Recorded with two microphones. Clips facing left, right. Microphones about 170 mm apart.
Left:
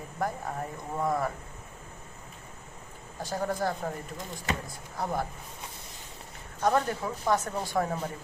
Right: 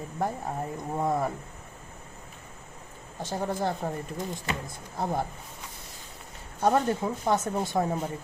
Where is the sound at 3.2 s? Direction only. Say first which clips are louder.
Right 1 dB; 20° right (ahead or behind).